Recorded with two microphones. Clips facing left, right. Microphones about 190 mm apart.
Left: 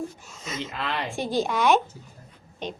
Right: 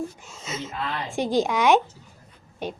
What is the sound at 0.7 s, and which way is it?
Speech, 80° left.